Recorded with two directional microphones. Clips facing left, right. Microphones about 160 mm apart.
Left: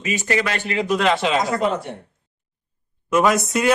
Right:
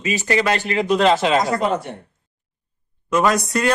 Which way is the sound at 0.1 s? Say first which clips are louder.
Right 3 dB; 30° right (ahead or behind).